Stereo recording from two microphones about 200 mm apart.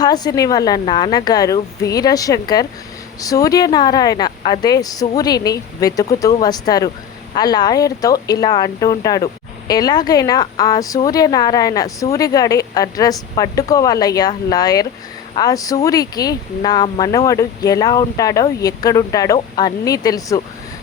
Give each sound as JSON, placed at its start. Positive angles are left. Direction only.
{"t": 0.0, "sound": "speech", "side_deg": 20}